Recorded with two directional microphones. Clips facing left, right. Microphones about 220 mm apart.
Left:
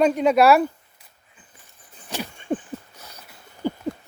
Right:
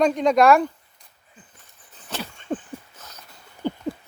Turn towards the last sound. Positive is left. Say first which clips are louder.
# left 1 dB
turn(degrees=10)  # may be behind; listen again after turning